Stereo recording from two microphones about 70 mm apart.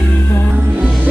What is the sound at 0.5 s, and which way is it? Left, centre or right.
Music, right.